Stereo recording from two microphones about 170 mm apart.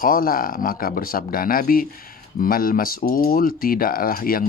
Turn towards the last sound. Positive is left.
turn(degrees=60)  # may be behind; listen again after turning